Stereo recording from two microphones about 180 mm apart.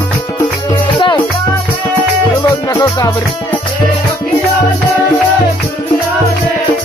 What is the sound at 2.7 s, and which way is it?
Music, 15° left (ahead or behind).